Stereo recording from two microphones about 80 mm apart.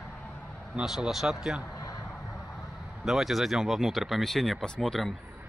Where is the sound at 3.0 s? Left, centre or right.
Centre.